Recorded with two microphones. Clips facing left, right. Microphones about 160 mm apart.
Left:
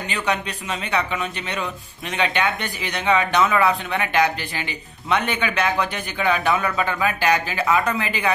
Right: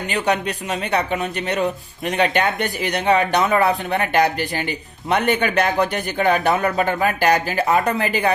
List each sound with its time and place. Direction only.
0.1 s speech: 40° right (ahead or behind)